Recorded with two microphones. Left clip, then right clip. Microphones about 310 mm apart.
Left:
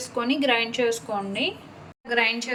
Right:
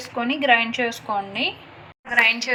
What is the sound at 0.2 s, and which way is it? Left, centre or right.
A woman's voice, centre.